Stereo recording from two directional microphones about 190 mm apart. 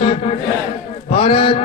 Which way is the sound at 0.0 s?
30° left (ahead or behind).